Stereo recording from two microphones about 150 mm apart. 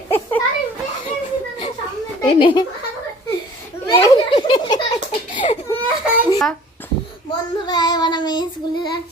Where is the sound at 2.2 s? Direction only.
35° left (ahead or behind).